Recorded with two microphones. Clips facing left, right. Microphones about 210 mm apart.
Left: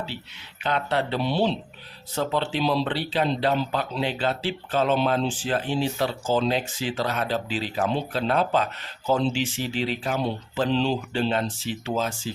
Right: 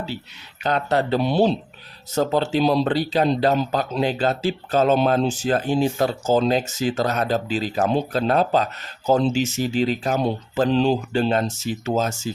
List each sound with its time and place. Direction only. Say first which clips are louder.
0.6 s speech: right 4 dB; 40° right (ahead or behind)